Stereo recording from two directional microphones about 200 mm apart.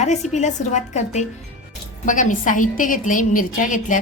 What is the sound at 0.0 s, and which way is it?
A woman's voice, 35° left (ahead or behind).